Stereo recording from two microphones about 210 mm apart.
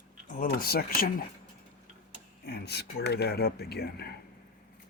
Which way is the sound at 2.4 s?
50° left (ahead or behind).